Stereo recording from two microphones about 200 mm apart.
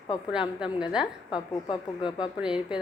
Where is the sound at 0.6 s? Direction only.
5° right (ahead or behind).